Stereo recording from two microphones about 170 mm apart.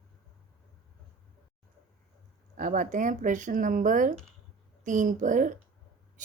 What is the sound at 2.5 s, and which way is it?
Speech, 50° right (ahead or behind).